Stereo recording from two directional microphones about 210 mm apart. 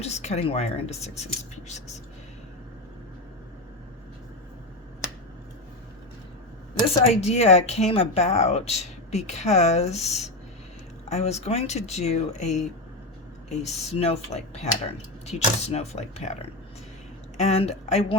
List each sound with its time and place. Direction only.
0.0 s speech: 30° left (ahead or behind)
7.0 s speech: 30° left (ahead or behind)